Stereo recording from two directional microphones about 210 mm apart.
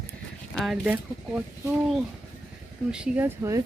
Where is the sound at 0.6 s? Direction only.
5° right (ahead or behind).